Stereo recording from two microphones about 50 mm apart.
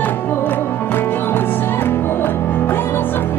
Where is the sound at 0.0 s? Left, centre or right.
Left.